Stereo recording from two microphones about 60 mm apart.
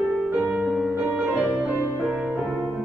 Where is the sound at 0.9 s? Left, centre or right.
Centre.